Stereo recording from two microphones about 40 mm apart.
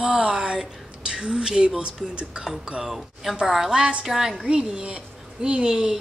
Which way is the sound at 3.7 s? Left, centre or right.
Right.